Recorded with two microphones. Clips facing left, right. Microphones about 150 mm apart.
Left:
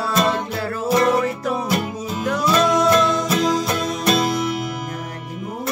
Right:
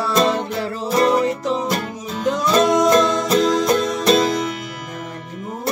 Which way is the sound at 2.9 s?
35° right (ahead or behind).